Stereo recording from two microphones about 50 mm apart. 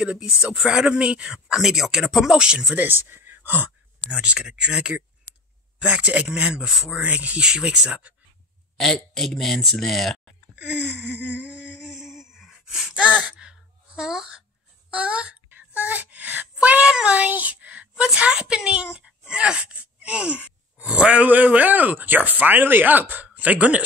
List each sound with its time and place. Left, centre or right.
0.0 s speech: centre
1.5 s speech: centre
2.3 s speech: centre
2.9 s speech: right
4.1 s a child's voice: centre
7.0 s a child's voice: right
8.7 s a man's voice: centre
10.5 s a sound: right
11.8 s a sound: centre
12.9 s speech: right
14.9 s speech: right
16.8 s a child's voice: right